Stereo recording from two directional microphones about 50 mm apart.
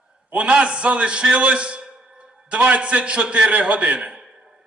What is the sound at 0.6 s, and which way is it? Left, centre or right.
A man's voice, right.